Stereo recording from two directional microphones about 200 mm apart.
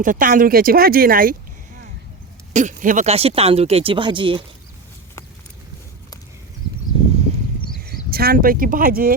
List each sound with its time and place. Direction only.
0.0 s speech: 40° right (ahead or behind)
2.5 s speech: 35° right (ahead or behind)
7.9 s speech: 50° right (ahead or behind)